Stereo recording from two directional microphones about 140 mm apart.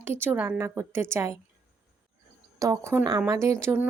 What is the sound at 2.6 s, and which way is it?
A woman's voice, 20° right (ahead or behind).